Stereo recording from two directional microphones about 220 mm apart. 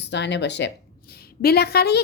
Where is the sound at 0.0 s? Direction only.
50° left (ahead or behind).